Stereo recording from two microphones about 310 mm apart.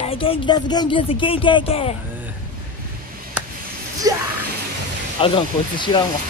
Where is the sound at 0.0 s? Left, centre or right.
Centre.